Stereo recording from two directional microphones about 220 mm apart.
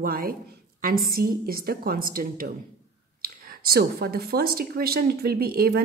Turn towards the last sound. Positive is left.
turn(degrees=-45)  # may be behind; listen again after turning